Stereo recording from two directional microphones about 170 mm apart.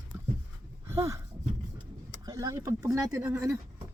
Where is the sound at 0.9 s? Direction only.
15° right (ahead or behind).